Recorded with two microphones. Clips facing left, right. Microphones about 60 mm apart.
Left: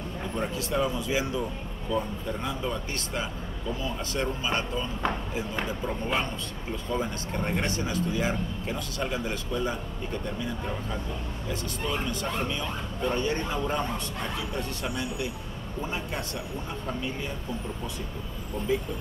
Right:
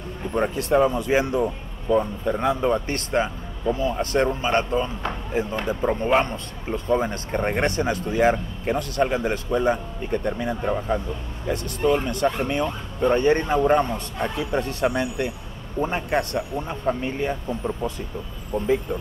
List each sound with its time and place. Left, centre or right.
0.3 s speech: right